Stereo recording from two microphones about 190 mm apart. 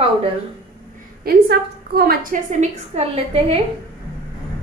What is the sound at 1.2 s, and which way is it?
A woman's voice, 55° right (ahead or behind).